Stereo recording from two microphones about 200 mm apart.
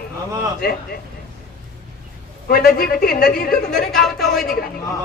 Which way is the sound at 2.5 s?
45° left (ahead or behind).